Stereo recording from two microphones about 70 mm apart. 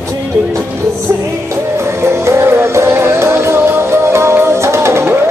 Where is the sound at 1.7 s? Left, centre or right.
Right.